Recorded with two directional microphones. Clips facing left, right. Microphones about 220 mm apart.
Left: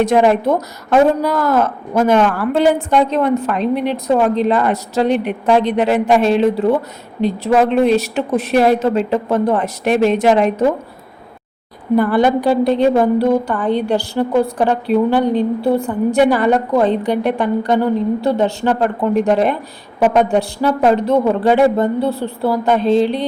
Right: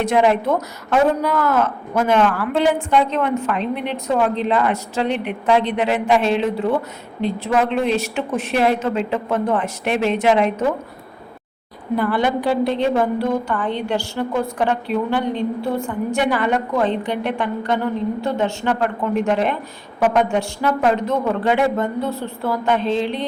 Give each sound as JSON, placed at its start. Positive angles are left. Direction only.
{"t": 0.0, "sound": "a woman's voice", "side_deg": 40}
{"t": 11.9, "sound": "a woman's voice", "side_deg": 45}